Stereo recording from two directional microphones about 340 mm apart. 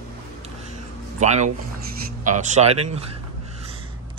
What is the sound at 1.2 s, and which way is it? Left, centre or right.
Speech, right.